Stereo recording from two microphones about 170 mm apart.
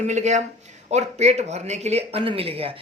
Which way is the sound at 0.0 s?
45° right (ahead or behind).